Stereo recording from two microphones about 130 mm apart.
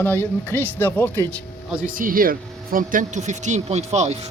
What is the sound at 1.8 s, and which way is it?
Speech, 90° right.